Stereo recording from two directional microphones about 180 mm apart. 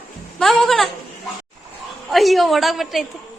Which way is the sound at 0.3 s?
Centre (ahead or behind).